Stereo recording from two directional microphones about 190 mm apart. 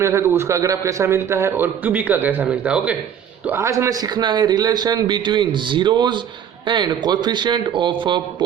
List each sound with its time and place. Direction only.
0.0 s a man's voice: 15° right (ahead or behind)